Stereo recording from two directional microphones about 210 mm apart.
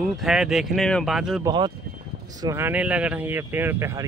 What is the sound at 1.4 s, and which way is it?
Speech, 20° right (ahead or behind).